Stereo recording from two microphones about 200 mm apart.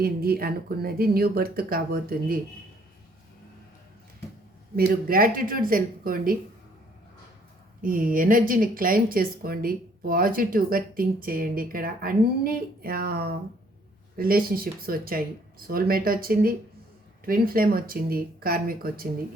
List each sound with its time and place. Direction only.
0.0 s speech: 50° right (ahead or behind)
5.0 s speech: 45° right (ahead or behind)
7.8 s speech: 45° right (ahead or behind)